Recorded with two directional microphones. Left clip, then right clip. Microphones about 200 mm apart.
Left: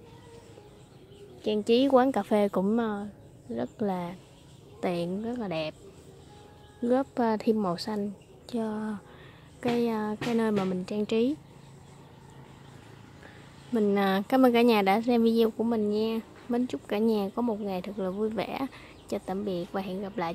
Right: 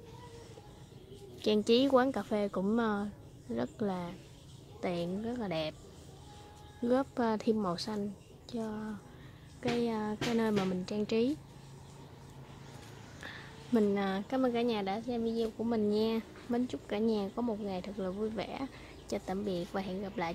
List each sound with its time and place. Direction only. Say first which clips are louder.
1.4 s speech: left 3 dB; 5° left (ahead or behind); by 2.7 s 20° left (ahead or behind)
2.7 s speech: left 3 dB; 5° left (ahead or behind)
6.9 s speech: left 5 dB; 10° left (ahead or behind)
13.9 s speech: left 9 dB; 20° left (ahead or behind)
15.7 s speech: left 3 dB; 10° left (ahead or behind)